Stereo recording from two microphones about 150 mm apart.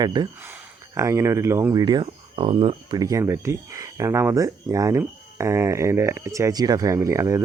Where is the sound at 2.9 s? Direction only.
25° right (ahead or behind).